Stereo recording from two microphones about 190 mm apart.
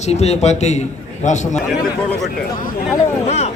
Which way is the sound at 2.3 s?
45° left (ahead or behind).